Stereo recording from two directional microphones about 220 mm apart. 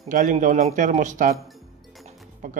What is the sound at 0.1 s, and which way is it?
Speech, 35° right (ahead or behind).